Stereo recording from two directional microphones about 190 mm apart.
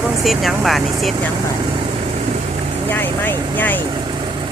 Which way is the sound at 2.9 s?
10° left (ahead or behind).